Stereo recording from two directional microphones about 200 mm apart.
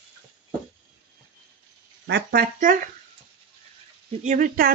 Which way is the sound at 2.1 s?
50° right (ahead or behind).